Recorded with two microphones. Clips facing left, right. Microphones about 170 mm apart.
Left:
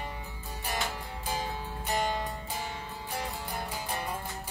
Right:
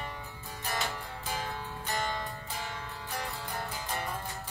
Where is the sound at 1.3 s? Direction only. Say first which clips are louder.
Left 2 dB; 15° left (ahead or behind).